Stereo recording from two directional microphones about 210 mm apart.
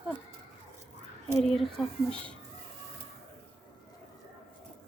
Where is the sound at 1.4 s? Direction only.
Centre (ahead or behind).